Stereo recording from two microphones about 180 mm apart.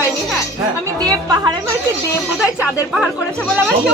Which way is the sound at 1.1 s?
20° right (ahead or behind).